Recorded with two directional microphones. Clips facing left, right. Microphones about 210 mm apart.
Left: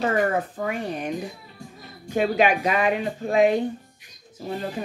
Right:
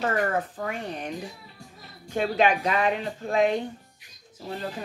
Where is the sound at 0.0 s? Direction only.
10° left (ahead or behind).